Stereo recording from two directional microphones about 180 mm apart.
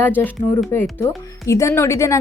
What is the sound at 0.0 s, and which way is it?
Speech, 10° left (ahead or behind).